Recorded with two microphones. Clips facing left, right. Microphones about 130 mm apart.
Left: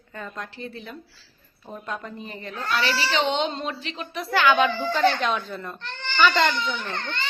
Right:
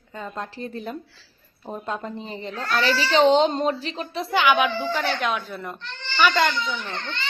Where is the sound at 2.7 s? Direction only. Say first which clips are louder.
Right 4 dB; 35° right (ahead or behind); by 6.5 s 15° right (ahead or behind).